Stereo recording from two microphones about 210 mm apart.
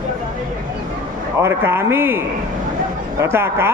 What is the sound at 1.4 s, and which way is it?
Speech, 10° right (ahead or behind).